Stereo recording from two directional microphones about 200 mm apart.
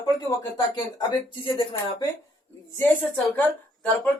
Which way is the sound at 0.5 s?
20° left (ahead or behind).